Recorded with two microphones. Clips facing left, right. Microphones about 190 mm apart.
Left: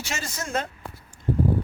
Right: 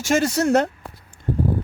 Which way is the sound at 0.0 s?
55° right (ahead or behind).